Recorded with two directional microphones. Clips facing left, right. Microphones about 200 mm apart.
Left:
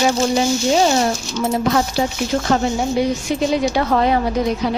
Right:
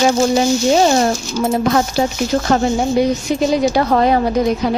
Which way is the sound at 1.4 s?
45° right (ahead or behind).